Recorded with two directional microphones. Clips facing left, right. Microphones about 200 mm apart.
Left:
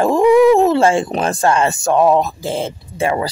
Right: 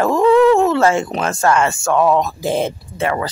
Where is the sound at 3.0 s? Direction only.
10° left (ahead or behind).